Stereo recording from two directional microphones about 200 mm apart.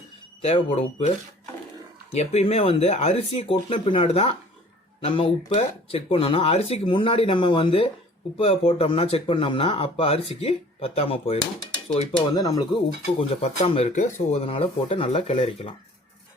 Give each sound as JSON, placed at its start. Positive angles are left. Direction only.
{"t": 0.4, "sound": "speech", "side_deg": 30}
{"t": 2.1, "sound": "speech", "side_deg": 30}
{"t": 12.3, "sound": "speech", "side_deg": 20}
{"t": 13.1, "sound": "speech", "side_deg": 30}